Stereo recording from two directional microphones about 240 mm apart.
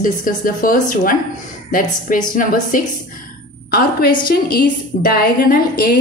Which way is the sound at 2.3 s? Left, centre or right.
Left.